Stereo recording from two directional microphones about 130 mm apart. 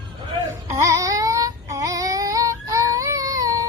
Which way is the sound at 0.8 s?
25° right (ahead or behind).